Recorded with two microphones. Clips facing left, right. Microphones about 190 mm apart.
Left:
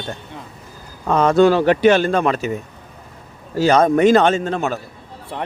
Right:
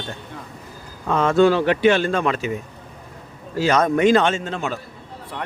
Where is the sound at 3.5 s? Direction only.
35° left (ahead or behind).